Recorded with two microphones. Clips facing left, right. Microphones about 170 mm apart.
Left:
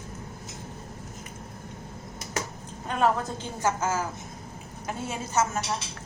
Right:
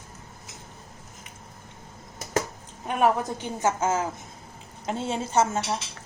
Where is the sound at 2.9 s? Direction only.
15° right (ahead or behind).